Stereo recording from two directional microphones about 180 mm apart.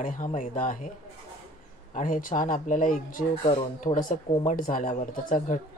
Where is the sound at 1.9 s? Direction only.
45° left (ahead or behind).